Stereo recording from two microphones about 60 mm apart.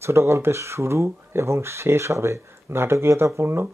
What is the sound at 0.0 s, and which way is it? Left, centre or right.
Speech, right.